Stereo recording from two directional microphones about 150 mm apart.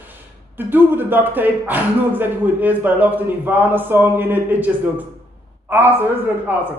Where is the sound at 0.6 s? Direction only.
15° right (ahead or behind).